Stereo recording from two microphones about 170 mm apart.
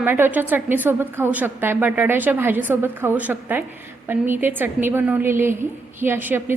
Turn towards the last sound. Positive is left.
turn(degrees=-10)  # may be behind; listen again after turning